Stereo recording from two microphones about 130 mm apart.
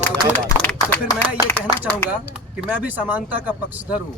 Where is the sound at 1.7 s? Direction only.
15° left (ahead or behind).